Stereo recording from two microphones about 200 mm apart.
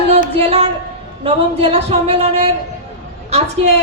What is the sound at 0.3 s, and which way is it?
A woman's voice, 30° right (ahead or behind).